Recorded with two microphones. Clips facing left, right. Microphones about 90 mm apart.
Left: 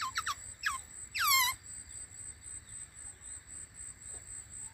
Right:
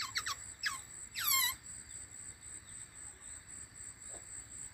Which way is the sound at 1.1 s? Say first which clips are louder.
Left 9 dB; 90° left.